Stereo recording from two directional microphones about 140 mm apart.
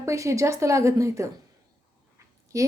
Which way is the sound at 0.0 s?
20° right (ahead or behind).